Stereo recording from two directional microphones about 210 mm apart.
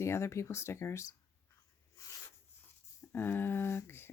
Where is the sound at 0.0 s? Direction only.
15° left (ahead or behind).